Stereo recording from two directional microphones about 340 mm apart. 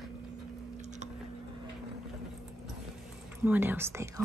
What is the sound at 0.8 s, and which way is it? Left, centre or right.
Squish, centre.